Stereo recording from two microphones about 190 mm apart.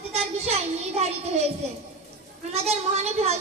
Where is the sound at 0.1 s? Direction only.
35° right (ahead or behind).